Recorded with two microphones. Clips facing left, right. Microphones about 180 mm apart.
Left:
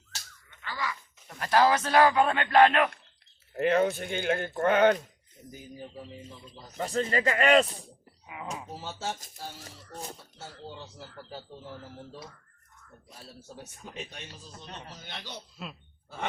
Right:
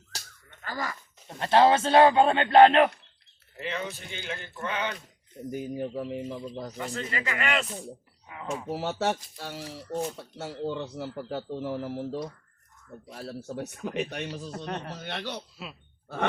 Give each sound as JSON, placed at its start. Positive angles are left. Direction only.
{"t": 0.1, "sound": "slap", "side_deg": -35}
{"t": 0.5, "sound": "a sound", "side_deg": -45}
{"t": 1.3, "sound": "a man's voice", "side_deg": -25}
{"t": 3.5, "sound": "speech", "side_deg": 55}
{"t": 5.5, "sound": "speech", "side_deg": -65}
{"t": 6.7, "sound": "speech", "side_deg": 40}
{"t": 8.3, "sound": "speech", "side_deg": 5}
{"t": 8.7, "sound": "speech", "side_deg": -70}